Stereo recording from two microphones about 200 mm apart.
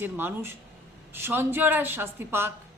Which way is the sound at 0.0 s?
10° right (ahead or behind).